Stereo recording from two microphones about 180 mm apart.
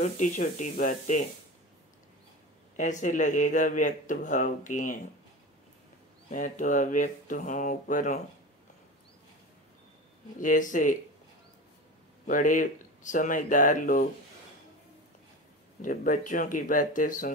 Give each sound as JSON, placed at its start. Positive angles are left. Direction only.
{"t": 0.0, "sound": "speech", "side_deg": 45}
{"t": 2.8, "sound": "speech", "side_deg": 45}
{"t": 6.3, "sound": "speech", "side_deg": 45}
{"t": 10.4, "sound": "speech", "side_deg": 45}
{"t": 12.3, "sound": "speech", "side_deg": 45}
{"t": 15.8, "sound": "speech", "side_deg": 45}